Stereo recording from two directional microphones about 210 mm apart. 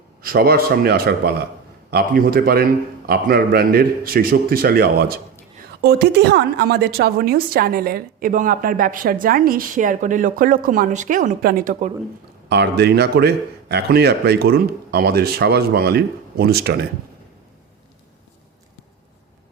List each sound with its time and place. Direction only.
0.2 s a woman's voice: 45° right (ahead or behind)
12.5 s a woman's voice: 50° right (ahead or behind)